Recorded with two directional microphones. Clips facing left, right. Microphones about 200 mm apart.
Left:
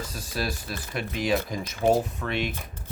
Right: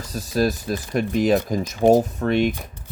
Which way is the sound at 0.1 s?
40° right (ahead or behind).